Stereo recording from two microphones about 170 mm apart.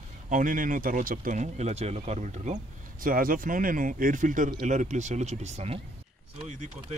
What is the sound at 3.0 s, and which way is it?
Speech, 55° right (ahead or behind).